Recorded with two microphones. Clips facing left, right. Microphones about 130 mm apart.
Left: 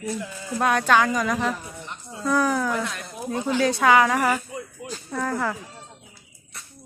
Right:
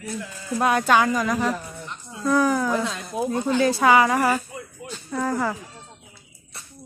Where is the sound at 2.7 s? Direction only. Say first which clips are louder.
Right 3 dB; 20° right (ahead or behind).